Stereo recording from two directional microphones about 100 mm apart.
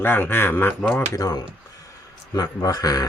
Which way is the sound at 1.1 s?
40° left (ahead or behind).